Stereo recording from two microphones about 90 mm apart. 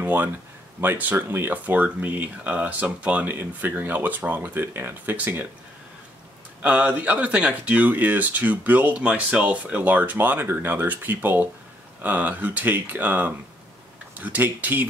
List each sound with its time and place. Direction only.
0.0 s speech: 20° right (ahead or behind)
6.6 s speech: 15° right (ahead or behind)